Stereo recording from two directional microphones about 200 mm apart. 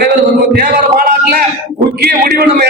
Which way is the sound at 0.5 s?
50° right (ahead or behind).